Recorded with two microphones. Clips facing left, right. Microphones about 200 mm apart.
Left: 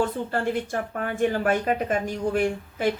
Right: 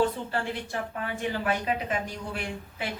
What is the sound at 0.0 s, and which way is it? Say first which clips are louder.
A woman's voice: left 2 dB; 45° left (ahead or behind).